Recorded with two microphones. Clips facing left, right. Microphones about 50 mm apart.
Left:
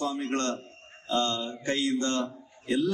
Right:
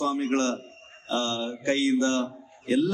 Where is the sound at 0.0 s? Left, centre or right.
Right.